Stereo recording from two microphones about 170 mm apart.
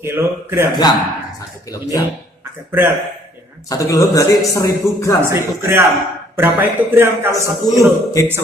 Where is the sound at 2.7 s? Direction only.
15° right (ahead or behind).